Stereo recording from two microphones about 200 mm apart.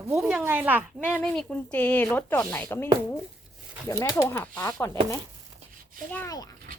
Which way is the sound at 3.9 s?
15° left (ahead or behind).